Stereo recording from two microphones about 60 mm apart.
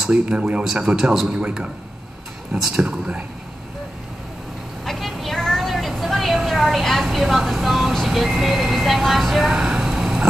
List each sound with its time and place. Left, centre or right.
0.1 s speech: centre
0.9 s speech: centre
1.4 s speech: centre
4.8 s music: centre